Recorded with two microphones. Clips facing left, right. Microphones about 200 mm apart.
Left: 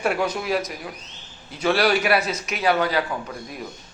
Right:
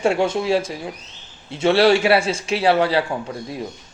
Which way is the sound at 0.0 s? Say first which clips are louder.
Right 5 dB; 25° right (ahead or behind).